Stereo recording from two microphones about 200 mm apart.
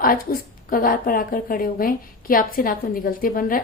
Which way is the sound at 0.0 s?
45° left (ahead or behind).